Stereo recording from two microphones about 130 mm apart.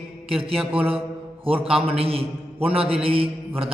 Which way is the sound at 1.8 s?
50° right (ahead or behind).